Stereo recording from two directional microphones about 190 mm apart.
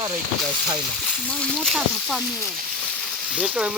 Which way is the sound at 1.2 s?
5° left (ahead or behind).